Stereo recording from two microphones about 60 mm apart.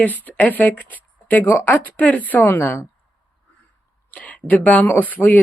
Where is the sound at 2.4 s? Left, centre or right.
Left.